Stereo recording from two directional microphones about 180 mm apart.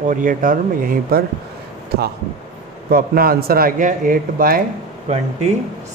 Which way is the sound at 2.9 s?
55° right (ahead or behind).